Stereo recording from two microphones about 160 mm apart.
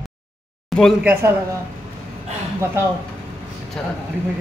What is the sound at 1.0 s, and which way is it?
Speech, 15° right (ahead or behind).